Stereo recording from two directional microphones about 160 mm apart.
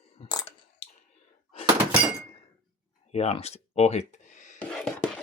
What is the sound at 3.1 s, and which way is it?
Speech, 40° left (ahead or behind).